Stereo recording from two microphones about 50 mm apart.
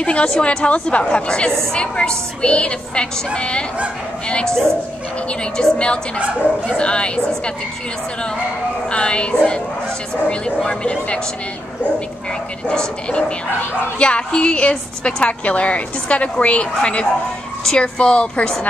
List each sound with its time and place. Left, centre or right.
0.0 s a woman's voice: left
5.3 s a woman's voice: left
8.9 s a woman's voice: left
12.6 s a woman's voice: centre